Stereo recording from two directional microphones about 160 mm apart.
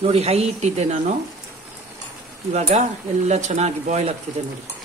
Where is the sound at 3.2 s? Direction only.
45° right (ahead or behind).